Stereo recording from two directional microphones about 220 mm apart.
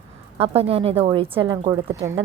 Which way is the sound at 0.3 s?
25° right (ahead or behind).